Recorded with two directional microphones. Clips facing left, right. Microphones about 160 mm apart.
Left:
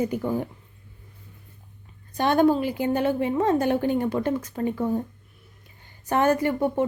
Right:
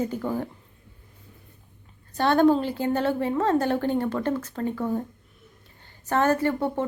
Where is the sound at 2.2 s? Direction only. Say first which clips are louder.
Even; 10° left (ahead or behind).